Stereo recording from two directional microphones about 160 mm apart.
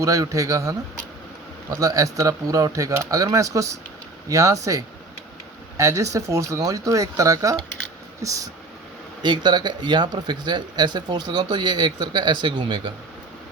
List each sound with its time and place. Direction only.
0.0 s speech: 20° right (ahead or behind)